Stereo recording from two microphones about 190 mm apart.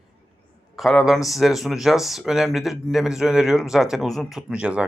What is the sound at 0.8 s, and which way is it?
Speech, centre (ahead or behind).